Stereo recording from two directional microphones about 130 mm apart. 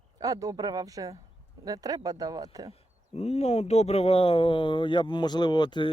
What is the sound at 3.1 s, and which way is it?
Speech, 55° left (ahead or behind).